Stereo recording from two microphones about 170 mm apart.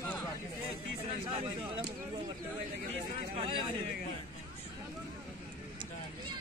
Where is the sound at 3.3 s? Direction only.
30° right (ahead or behind).